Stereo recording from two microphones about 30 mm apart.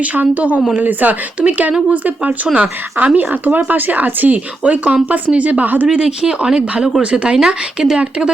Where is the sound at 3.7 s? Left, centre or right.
Right.